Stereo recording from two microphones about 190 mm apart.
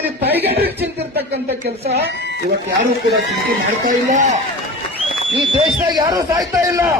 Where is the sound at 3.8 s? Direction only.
40° right (ahead or behind).